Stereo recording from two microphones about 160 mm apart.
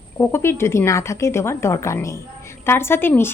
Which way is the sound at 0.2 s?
15° left (ahead or behind).